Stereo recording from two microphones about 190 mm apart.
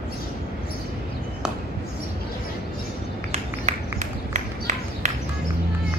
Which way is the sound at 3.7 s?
35° right (ahead or behind).